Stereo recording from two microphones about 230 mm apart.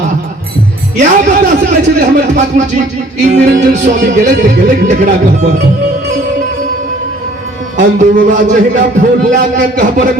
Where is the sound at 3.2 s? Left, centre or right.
Right.